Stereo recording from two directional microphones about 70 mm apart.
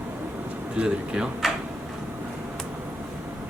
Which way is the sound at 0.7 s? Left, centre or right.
Centre.